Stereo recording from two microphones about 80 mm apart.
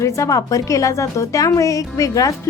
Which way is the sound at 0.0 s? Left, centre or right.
Left.